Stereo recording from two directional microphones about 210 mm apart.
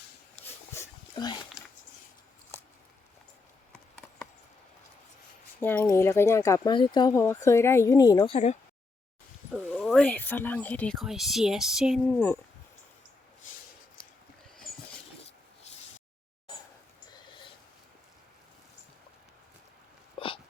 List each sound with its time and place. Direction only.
0.4 s dog: 15° left (ahead or behind)
1.1 s speech: 20° left (ahead or behind)
5.5 s speech: 10° left (ahead or behind)
9.7 s speech: 5° left (ahead or behind)
17.1 s a sound: 25° left (ahead or behind)
20.1 s hiccup: 25° left (ahead or behind)